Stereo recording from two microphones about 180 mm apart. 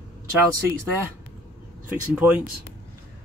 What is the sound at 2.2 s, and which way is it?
Speech, 10° right (ahead or behind).